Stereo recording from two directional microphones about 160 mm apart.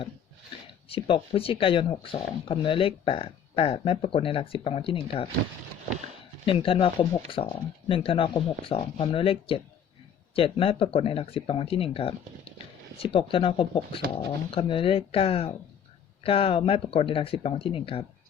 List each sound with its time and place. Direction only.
0.9 s speech: 35° left (ahead or behind)
6.4 s speech: 35° left (ahead or behind)